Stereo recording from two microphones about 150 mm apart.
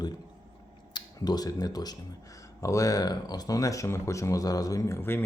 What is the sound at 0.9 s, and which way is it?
Speech, 25° left (ahead or behind).